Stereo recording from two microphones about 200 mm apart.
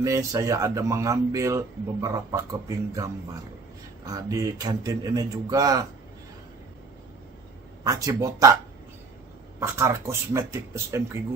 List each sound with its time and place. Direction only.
0.0 s a man's voice: 15° right (ahead or behind)
7.8 s a man's voice: 15° right (ahead or behind)
9.6 s a man's voice: 15° right (ahead or behind)